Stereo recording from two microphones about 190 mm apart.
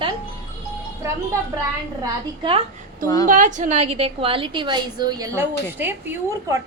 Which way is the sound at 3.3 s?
40° right (ahead or behind).